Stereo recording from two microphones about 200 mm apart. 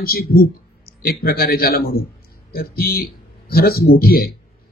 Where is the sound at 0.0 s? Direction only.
50° left (ahead or behind).